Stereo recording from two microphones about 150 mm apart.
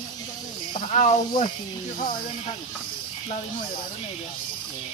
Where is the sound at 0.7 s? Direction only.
50° left (ahead or behind).